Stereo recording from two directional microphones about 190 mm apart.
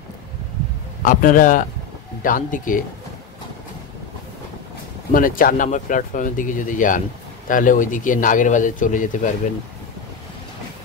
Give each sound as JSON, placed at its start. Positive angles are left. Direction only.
{"t": 1.0, "sound": "speech", "side_deg": 45}
{"t": 5.1, "sound": "speech", "side_deg": 50}